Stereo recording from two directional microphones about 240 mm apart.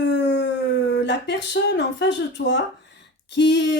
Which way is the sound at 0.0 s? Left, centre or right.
Left.